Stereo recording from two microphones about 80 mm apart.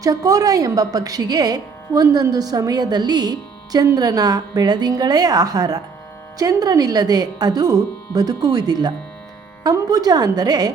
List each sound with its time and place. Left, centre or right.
0.0 s speech: right